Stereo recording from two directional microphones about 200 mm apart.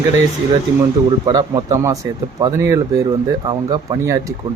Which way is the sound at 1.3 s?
20° right (ahead or behind).